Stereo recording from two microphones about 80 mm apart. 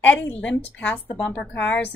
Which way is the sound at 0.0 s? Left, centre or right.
Centre.